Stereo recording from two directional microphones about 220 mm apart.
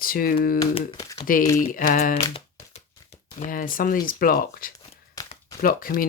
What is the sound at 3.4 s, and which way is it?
Speech, 40° left (ahead or behind).